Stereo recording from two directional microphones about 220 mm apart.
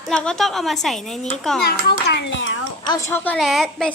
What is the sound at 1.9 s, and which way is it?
Speech, 50° left (ahead or behind).